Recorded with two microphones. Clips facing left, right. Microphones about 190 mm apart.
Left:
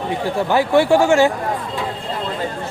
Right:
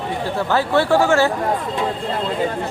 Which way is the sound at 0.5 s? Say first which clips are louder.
Left 2 dB; 15° left (ahead or behind).